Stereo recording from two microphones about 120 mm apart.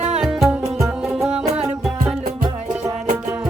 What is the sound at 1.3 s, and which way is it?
Music, 60° right (ahead or behind).